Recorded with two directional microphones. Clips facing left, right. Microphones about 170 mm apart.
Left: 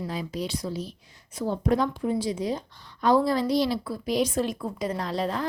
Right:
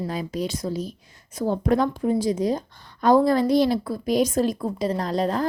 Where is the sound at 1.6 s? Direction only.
55° right (ahead or behind).